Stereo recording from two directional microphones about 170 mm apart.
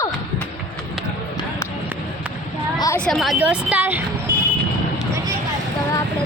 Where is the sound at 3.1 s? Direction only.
Centre (ahead or behind).